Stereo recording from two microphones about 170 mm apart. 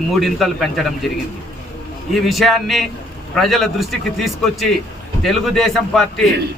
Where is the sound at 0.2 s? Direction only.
Centre (ahead or behind).